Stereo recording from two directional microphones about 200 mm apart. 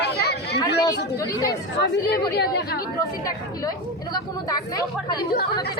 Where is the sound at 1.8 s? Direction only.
55° left (ahead or behind).